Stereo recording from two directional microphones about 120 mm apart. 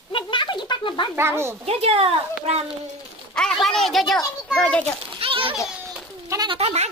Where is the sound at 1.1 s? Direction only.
20° right (ahead or behind).